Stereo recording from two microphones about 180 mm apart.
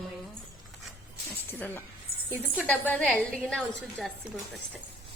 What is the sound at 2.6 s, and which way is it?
A woman's voice, 10° left (ahead or behind).